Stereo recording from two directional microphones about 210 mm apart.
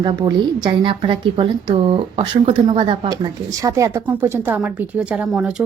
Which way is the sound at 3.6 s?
15° right (ahead or behind).